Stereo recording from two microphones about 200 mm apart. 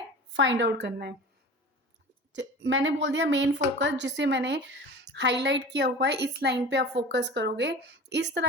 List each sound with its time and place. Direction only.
0.3 s speech: 65° right (ahead or behind)
2.3 s speech: 65° right (ahead or behind)